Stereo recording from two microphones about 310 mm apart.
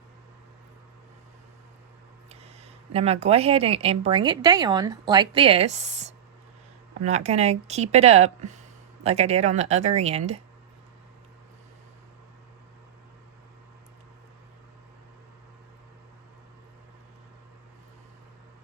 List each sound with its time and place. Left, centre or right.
2.3 s speech: centre